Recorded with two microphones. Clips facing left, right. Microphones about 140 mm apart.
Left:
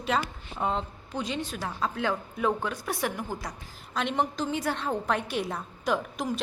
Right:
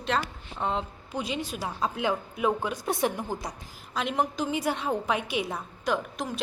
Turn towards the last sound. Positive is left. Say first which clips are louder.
# left 1 dB
turn(degrees=0)  # may be behind; listen again after turning